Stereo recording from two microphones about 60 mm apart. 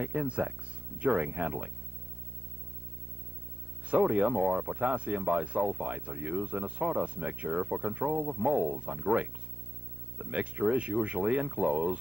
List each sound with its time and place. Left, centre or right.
0.0 s speech: centre
3.9 s speech: right